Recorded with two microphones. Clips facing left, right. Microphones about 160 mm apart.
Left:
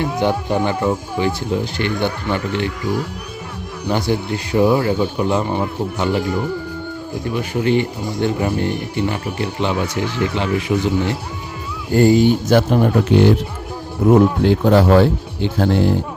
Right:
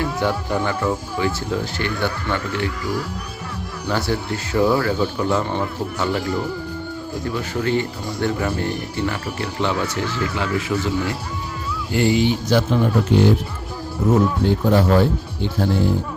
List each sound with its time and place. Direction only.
0.0 s speech: 20° left (ahead or behind)
3.8 s speech: 20° left (ahead or behind)
7.3 s speech: 20° left (ahead or behind)
11.9 s speech: 45° left (ahead or behind); by 13.2 s 60° left (ahead or behind)
14.1 s speech: 85° left